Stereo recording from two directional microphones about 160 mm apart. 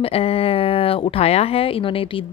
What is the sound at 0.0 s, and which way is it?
Speech, 35° left (ahead or behind).